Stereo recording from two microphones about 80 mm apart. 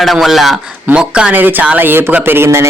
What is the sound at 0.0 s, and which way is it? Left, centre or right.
A man's voice, centre.